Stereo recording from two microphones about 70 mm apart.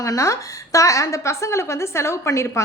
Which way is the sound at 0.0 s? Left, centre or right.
Left.